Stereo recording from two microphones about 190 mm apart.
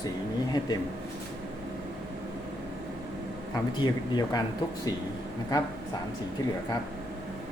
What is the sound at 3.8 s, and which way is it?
Speech, 20° left (ahead or behind).